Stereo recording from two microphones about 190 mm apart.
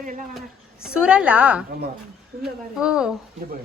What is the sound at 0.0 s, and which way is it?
Speech, 45° right (ahead or behind).